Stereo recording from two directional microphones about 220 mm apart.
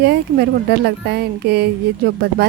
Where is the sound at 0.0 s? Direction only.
50° right (ahead or behind).